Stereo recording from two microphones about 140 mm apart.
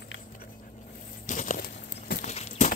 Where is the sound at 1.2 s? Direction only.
65° left (ahead or behind); by 2.2 s 90° left.